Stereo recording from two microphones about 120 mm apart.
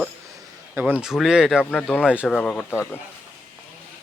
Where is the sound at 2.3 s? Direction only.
5° left (ahead or behind).